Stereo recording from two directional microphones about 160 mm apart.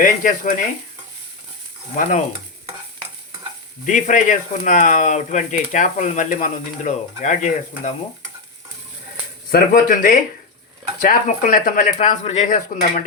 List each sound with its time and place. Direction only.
0.0 s speech: 55° left (ahead or behind)
2.0 s speech: 55° left (ahead or behind)
3.8 s speech: 50° left (ahead or behind)
9.5 s speech: 65° left (ahead or behind)
11.9 s speech: 45° left (ahead or behind)